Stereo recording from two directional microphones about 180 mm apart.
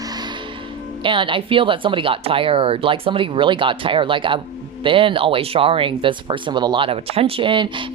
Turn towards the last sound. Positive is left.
turn(degrees=-25)  # may be behind; listen again after turning